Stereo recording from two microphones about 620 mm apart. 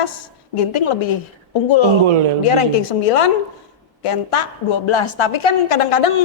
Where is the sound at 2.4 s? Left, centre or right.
Left.